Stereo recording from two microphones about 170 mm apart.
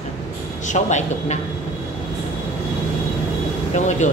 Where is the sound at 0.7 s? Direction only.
45° left (ahead or behind).